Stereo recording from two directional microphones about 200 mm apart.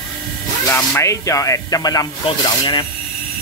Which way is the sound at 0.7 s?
15° left (ahead or behind).